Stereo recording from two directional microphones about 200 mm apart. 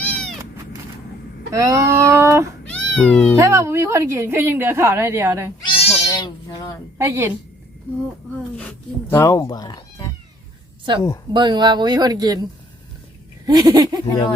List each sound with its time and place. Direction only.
0.0 s cat: centre (ahead or behind)
1.5 s a woman's voice: 15° right (ahead or behind)
2.6 s cat: 5° left (ahead or behind)
3.3 s a woman's voice: 15° right (ahead or behind)
5.6 s cat: 30° left (ahead or behind)
6.1 s speech: 20° left (ahead or behind)
7.0 s a woman's voice: 15° right (ahead or behind)
9.0 s speech: 15° left (ahead or behind)
10.9 s speech: 25° right (ahead or behind)
13.5 s speech: 20° right (ahead or behind)